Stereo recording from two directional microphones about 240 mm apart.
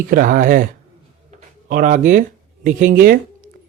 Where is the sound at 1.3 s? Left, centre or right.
Right.